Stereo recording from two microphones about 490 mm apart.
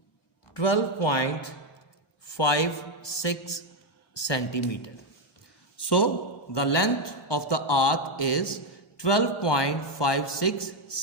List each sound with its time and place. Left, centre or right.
0.5 s a man's voice: left